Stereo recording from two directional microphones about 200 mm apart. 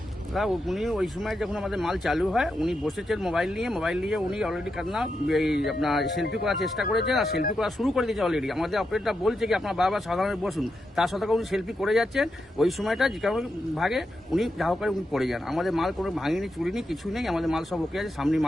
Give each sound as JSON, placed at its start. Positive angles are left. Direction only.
{"t": 0.3, "sound": "speech", "side_deg": 0}